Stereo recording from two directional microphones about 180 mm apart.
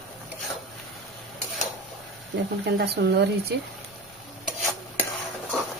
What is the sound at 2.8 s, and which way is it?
Speech, 65° right (ahead or behind).